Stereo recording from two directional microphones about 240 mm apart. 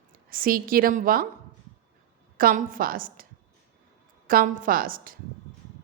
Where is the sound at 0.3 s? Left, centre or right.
Right.